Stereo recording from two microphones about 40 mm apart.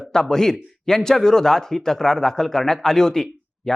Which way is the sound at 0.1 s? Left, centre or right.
Centre.